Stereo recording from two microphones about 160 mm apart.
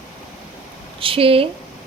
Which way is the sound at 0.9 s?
35° right (ahead or behind).